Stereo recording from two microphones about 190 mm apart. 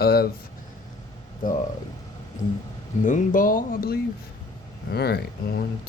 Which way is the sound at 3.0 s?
45° left (ahead or behind).